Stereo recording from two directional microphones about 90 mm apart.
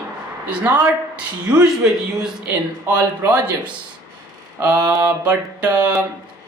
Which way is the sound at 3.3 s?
15° right (ahead or behind).